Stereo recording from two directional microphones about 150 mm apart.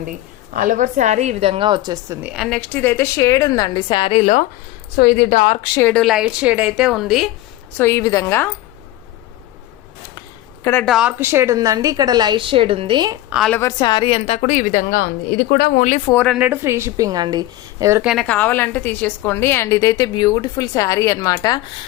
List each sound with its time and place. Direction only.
0.5 s a woman's voice: 65° right (ahead or behind); by 2.1 s 25° right (ahead or behind)
2.2 s a woman's voice: centre (ahead or behind); by 4.4 s 50° left (ahead or behind)
4.9 s a woman's voice: 90° left; by 5.5 s 65° left (ahead or behind)
5.8 s a woman's voice: 5° left (ahead or behind)
7.8 s a woman's voice: 15° left (ahead or behind)
10.2 s a sound: 20° left (ahead or behind)
10.8 s a woman's voice: 5° right (ahead or behind)
11.2 s a woman's voice: 15° right (ahead or behind)
13.5 s a woman's voice: 20° left (ahead or behind); by 15.9 s 90° left
16.1 s a woman's voice: 5° left (ahead or behind)
16.4 s a woman's voice: 15° right (ahead or behind)
18.0 s a woman's voice: 5° right (ahead or behind)
18.3 s a woman's voice: 10° left (ahead or behind)